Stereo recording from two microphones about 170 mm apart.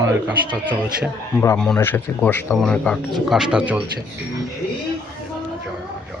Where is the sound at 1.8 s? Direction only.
15° left (ahead or behind); by 3.8 s 5° right (ahead or behind).